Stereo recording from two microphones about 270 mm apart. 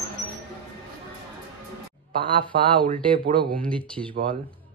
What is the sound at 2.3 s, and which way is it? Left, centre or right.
Speech, centre.